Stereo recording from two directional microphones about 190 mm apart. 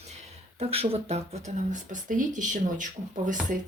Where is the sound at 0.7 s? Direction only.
30° right (ahead or behind).